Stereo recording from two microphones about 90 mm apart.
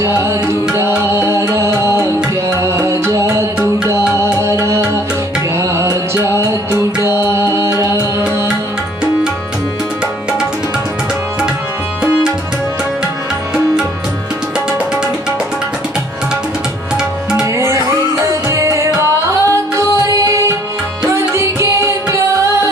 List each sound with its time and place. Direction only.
0.0 s music: 35° right (ahead or behind)
18.3 s music: 35° right (ahead or behind)